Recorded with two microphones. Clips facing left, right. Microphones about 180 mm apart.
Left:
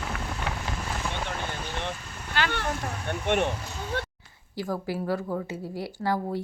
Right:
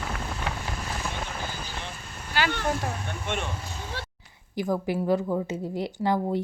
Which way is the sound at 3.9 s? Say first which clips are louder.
Left 9 dB; 55° left (ahead or behind).